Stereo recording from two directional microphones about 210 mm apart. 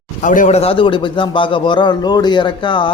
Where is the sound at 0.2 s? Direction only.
40° left (ahead or behind).